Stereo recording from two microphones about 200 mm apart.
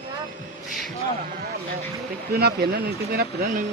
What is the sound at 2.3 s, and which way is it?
Speech, 50° right (ahead or behind).